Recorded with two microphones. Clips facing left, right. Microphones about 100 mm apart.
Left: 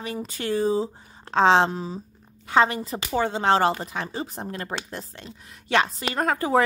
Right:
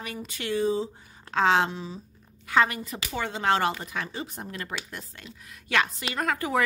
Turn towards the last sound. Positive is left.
turn(degrees=35)  # may be behind; listen again after turning